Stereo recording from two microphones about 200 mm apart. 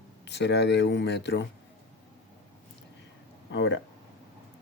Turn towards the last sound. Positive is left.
turn(degrees=65)  # may be behind; listen again after turning